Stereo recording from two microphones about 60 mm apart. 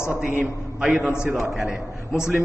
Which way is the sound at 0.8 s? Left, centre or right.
Centre.